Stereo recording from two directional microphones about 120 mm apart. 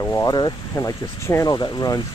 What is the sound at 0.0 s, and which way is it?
Speech, 20° left (ahead or behind).